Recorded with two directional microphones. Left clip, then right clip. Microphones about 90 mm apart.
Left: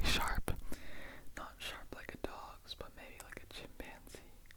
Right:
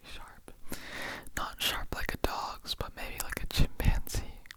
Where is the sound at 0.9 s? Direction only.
40° right (ahead or behind).